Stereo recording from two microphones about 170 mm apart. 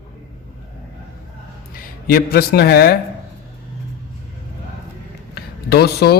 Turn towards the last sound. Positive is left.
turn(degrees=65)  # may be behind; listen again after turning